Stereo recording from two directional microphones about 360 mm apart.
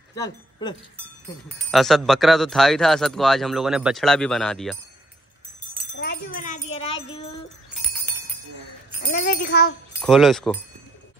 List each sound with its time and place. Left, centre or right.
0.1 s speech: centre
1.6 s speech: centre
5.9 s jingle bell: left
9.0 s speech: left
10.0 s speech: centre